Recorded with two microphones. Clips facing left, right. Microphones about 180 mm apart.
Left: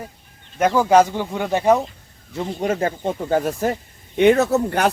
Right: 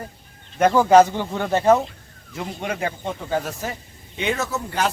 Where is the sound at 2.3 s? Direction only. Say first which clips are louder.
Left 6 dB; 35° left (ahead or behind).